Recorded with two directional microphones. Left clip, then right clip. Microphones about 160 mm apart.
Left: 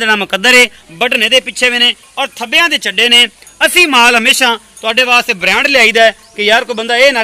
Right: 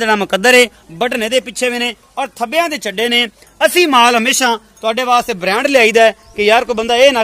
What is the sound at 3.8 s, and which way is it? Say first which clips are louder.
Speech: left 3 dB; 35° right (ahead or behind).